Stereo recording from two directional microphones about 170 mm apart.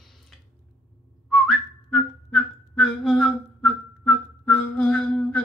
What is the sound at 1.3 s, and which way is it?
Whistling, centre (ahead or behind).